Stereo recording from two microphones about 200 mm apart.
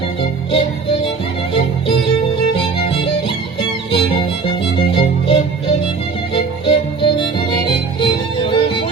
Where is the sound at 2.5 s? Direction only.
25° left (ahead or behind).